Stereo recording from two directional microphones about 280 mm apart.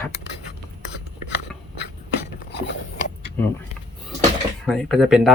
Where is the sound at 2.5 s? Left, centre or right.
Left.